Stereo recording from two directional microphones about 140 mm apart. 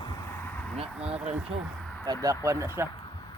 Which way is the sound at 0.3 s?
15° left (ahead or behind).